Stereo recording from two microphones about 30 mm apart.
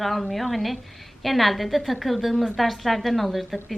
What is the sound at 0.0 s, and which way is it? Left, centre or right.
A woman's voice, centre.